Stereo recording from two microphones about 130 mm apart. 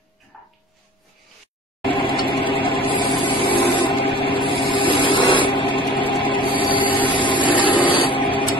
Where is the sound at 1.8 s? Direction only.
40° left (ahead or behind).